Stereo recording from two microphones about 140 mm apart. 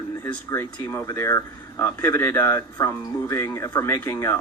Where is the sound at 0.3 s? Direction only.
15° left (ahead or behind).